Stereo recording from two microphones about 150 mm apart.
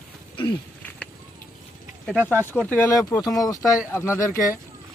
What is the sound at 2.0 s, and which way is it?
Speech, 10° right (ahead or behind).